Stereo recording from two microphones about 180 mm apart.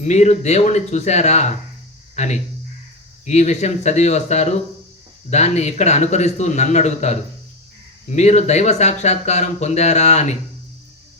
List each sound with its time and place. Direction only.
0.0 s speech: 40° left (ahead or behind)